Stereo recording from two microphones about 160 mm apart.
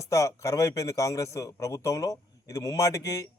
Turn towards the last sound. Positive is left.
turn(degrees=20)  # may be behind; listen again after turning